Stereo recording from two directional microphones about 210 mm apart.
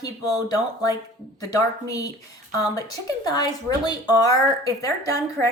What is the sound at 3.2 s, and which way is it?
Speech, 20° left (ahead or behind).